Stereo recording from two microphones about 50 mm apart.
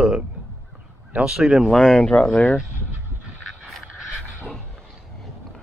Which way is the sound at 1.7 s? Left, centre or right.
Centre.